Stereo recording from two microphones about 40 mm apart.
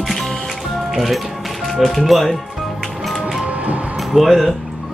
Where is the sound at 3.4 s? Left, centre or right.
Right.